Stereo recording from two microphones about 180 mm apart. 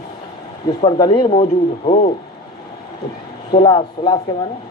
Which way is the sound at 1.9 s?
35° left (ahead or behind).